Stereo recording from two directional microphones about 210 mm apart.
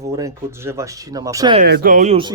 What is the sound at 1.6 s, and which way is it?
Speech, 45° right (ahead or behind).